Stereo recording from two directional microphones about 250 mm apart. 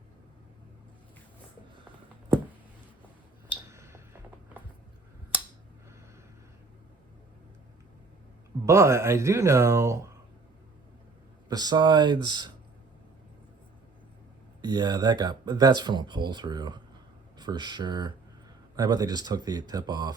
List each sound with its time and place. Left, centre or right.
3.7 s a sound: centre
8.6 s speech: centre
11.4 s speech: centre
14.6 s speech: centre